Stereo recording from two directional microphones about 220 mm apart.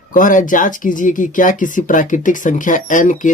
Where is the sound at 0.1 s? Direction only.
35° left (ahead or behind).